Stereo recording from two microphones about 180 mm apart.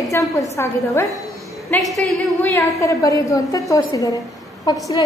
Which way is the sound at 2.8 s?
20° left (ahead or behind).